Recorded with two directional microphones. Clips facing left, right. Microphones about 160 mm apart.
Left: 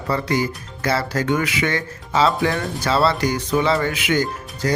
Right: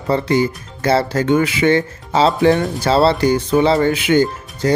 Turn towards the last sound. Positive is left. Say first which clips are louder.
# right 6 dB
turn(degrees=-30)  # may be behind; listen again after turning